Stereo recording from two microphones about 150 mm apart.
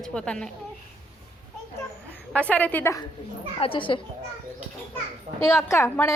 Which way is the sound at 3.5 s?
35° left (ahead or behind).